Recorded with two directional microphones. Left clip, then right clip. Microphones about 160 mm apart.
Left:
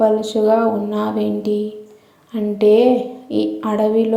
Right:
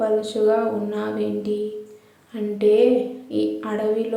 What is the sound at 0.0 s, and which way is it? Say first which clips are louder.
Speech: left 5 dB; 25° left (ahead or behind).